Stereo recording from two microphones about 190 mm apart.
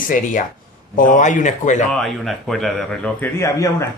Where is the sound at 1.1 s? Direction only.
40° left (ahead or behind).